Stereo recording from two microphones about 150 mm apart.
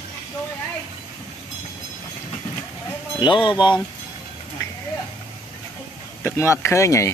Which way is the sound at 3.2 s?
35° left (ahead or behind).